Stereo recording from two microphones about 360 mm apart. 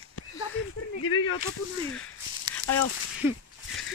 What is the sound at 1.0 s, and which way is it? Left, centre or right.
Speech, left.